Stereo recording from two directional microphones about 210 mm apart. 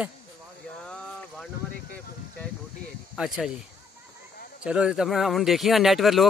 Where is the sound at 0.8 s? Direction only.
5° left (ahead or behind).